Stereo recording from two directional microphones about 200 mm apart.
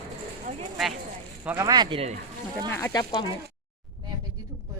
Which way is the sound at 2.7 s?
15° left (ahead or behind).